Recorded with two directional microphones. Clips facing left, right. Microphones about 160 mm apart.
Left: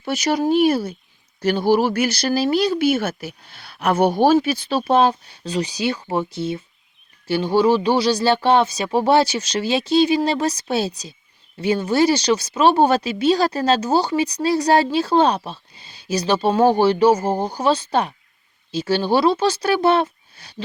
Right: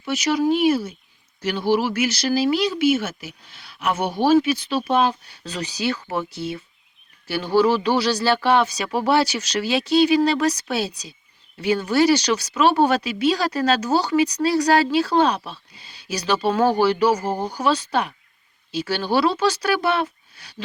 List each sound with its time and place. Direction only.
0.3 s speech: 35° left (ahead or behind); by 3.2 s 55° left (ahead or behind)
3.5 s a sound: 55° left (ahead or behind)
3.8 s speech: 50° left (ahead or behind)
4.4 s speech: 30° left (ahead or behind)
5.5 s speech: 20° left (ahead or behind)